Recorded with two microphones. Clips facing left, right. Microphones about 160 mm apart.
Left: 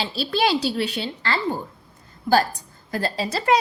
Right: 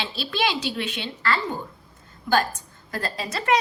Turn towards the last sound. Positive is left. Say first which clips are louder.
# left 3 dB
turn(degrees=30)  # may be behind; listen again after turning